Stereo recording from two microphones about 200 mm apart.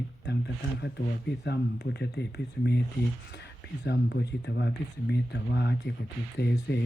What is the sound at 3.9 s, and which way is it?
Speech, 55° left (ahead or behind).